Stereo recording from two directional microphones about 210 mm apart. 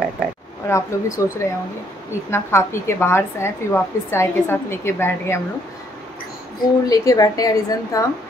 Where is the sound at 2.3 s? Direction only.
10° left (ahead or behind).